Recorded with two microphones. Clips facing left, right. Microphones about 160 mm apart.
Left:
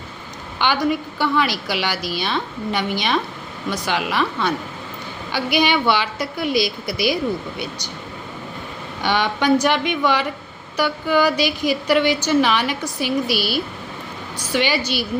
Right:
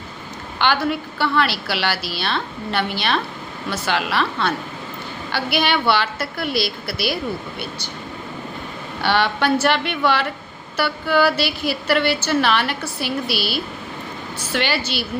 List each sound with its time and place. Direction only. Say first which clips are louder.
0.6 s a woman's voice: left 1 dB; 15° left (ahead or behind)
9.0 s a woman's voice: right 1 dB; 15° left (ahead or behind)